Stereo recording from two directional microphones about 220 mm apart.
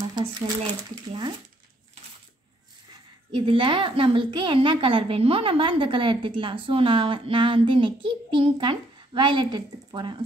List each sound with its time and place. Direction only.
0.1 s shuffling cards: 20° right (ahead or behind)
3.3 s a woman's voice: 20° right (ahead or behind)